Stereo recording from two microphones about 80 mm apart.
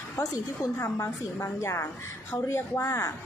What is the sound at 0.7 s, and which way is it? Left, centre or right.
Speech, left.